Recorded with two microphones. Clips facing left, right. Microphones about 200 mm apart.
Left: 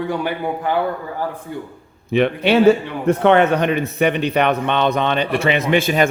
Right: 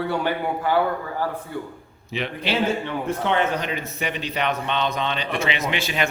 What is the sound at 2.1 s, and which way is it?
A man's voice, 60° left (ahead or behind).